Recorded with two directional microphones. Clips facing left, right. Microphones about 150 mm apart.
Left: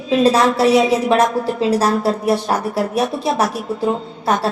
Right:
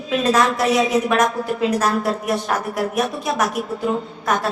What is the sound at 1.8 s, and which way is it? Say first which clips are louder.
Speech: left 3 dB; 30° left (ahead or behind).